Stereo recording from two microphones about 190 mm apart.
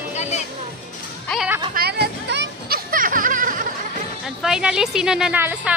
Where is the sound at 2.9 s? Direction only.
45° right (ahead or behind).